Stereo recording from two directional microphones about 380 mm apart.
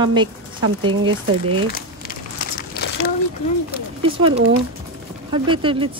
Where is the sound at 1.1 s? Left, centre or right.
Right.